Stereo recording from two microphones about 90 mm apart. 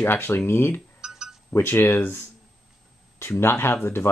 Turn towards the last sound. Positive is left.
turn(degrees=25)  # may be behind; listen again after turning